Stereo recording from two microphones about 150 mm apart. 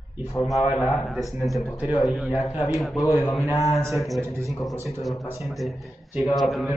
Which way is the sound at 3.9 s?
Centre (ahead or behind).